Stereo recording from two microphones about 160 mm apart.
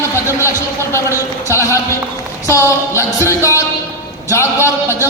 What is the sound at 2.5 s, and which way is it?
Music, 20° left (ahead or behind).